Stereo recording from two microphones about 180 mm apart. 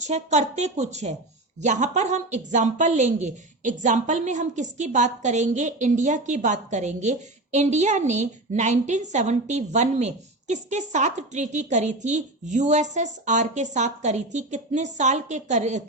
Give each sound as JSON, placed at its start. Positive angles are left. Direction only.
{"t": 0.0, "sound": "speech", "side_deg": -40}